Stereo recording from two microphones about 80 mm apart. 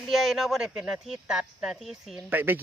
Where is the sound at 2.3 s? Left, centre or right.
Right.